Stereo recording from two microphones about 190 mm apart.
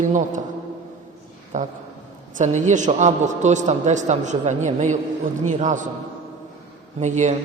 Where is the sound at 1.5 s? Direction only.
40° right (ahead or behind).